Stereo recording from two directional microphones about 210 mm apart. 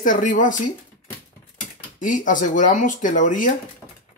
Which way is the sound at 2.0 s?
40° left (ahead or behind).